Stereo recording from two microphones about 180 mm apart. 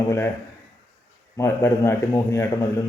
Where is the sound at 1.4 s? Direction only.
15° left (ahead or behind).